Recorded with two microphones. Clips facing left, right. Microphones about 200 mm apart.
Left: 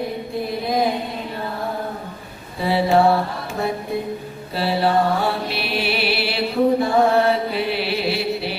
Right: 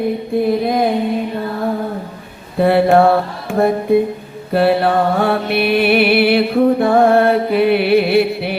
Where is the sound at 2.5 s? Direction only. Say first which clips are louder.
Right 6 dB; 55° right (ahead or behind).